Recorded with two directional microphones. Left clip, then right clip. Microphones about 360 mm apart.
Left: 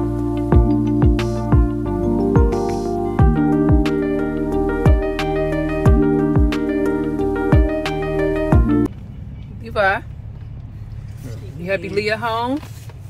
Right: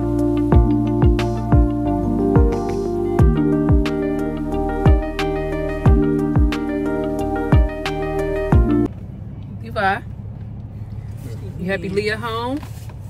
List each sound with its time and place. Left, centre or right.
0.1 s music: centre
9.7 s vehicle: centre
11.6 s speech: centre